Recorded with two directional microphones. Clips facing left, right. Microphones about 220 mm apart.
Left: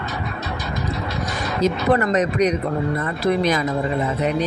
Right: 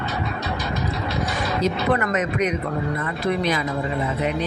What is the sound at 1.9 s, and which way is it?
Speech, 35° left (ahead or behind).